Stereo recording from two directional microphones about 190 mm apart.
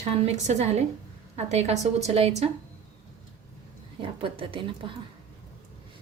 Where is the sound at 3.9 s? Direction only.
30° right (ahead or behind).